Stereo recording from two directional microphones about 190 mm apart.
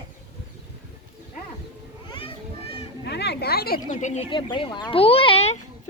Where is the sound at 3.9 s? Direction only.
40° left (ahead or behind).